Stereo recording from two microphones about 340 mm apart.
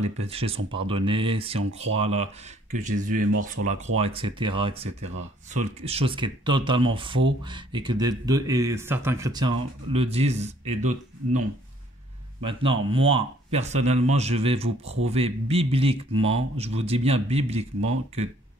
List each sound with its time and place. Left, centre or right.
0.2 s speech: centre